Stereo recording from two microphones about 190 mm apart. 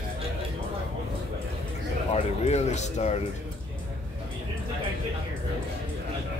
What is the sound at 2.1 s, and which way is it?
Speech, 35° left (ahead or behind).